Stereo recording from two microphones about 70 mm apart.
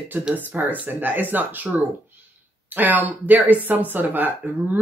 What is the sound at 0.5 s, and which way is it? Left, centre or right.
Speech, right.